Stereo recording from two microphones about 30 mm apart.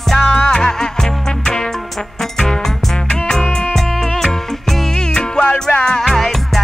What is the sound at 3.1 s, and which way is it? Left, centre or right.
Music, left.